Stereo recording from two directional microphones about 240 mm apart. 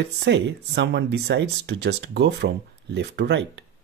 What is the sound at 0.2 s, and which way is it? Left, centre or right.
Speech, right.